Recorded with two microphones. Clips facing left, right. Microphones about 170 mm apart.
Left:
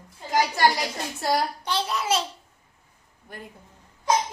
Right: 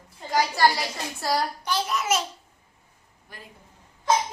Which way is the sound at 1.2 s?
25° left (ahead or behind).